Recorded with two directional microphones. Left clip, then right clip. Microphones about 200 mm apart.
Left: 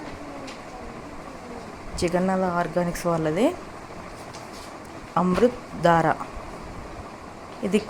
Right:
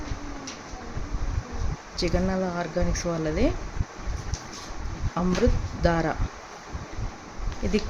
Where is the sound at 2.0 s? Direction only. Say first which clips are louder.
Left 4 dB; centre (ahead or behind).